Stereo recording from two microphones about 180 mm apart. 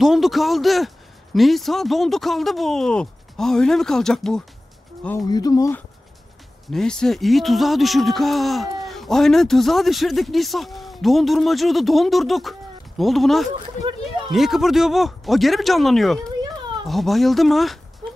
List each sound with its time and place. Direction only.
0.0 s speech: centre (ahead or behind)
5.3 s speech: 20° left (ahead or behind)
6.7 s speech: 5° left (ahead or behind)